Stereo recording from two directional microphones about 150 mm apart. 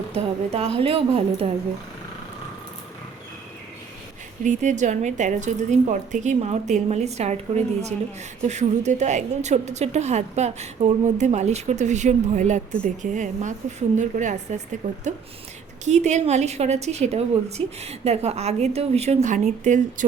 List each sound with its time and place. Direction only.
0.1 s a woman's voice: 40° right (ahead or behind)
4.4 s a woman's voice: 55° right (ahead or behind)